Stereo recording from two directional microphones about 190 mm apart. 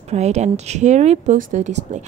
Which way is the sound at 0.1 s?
35° right (ahead or behind).